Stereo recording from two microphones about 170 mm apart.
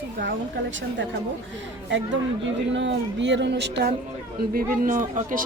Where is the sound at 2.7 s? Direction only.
90° right.